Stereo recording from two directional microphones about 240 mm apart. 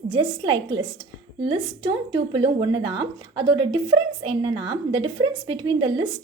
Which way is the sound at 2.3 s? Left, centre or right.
Right.